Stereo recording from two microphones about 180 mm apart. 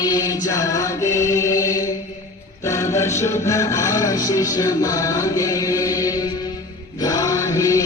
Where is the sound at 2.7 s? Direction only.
15° left (ahead or behind).